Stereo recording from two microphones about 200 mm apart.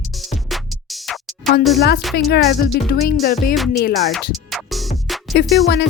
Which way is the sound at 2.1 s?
55° left (ahead or behind).